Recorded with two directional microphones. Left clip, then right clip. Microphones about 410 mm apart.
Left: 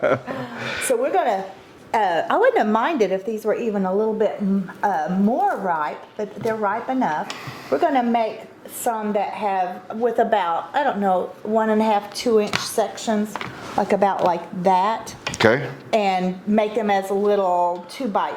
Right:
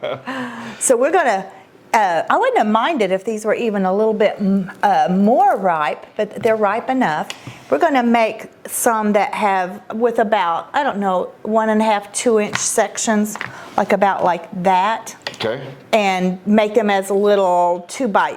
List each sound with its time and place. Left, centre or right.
0.3 s a sound: right
0.9 s a woman's voice: right
1.9 s a woman's voice: right
8.8 s a woman's voice: right
13.7 s speech: right
15.4 s speech: left
15.9 s a woman's voice: right